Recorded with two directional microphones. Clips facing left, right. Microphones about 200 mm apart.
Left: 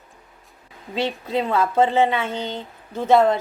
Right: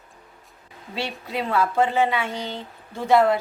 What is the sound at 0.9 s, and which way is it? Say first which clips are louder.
Speech: left 6 dB; 20° left (ahead or behind).